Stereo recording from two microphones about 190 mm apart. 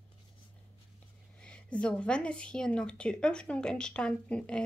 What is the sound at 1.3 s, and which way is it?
A woman's voice, 5° left (ahead or behind).